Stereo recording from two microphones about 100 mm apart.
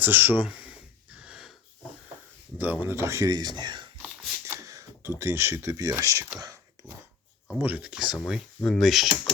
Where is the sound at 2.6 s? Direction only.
15° right (ahead or behind); by 3.9 s 50° right (ahead or behind).